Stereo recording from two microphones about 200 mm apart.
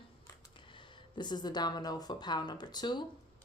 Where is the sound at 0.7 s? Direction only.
25° left (ahead or behind).